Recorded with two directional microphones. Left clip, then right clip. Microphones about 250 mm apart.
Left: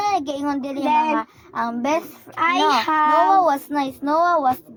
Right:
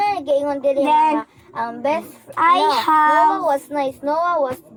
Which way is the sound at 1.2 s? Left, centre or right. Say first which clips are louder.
Even; left.